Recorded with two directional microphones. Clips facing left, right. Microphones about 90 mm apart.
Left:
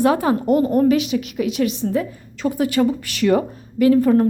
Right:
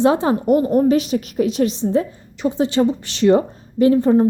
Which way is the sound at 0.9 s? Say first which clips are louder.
Right 1 dB; 35° right (ahead or behind).